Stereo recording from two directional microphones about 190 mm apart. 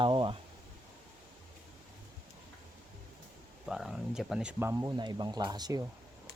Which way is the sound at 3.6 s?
Centre (ahead or behind).